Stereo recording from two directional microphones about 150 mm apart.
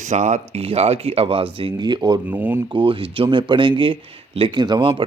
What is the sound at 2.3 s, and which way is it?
Speech, 10° right (ahead or behind).